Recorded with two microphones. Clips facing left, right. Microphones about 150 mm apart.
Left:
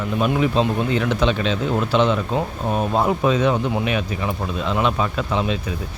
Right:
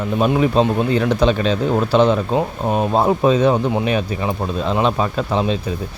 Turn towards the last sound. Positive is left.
turn(degrees=-35)  # may be behind; listen again after turning